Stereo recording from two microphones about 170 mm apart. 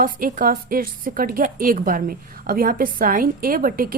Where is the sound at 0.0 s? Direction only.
55° right (ahead or behind).